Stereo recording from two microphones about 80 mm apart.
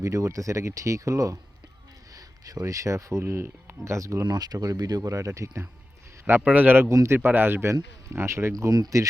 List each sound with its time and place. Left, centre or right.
0.0 s speech: right
3.9 s speech: right
6.4 s speech: centre
6.8 s speech: right
7.2 s speech: right
8.5 s speech: right